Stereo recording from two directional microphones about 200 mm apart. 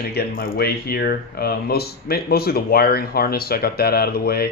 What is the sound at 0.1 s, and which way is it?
Speech, 50° left (ahead or behind).